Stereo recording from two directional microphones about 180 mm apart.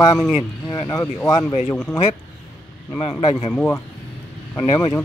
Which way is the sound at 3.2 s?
35° left (ahead or behind).